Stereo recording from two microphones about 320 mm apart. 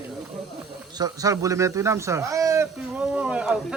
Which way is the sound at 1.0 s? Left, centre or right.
Centre.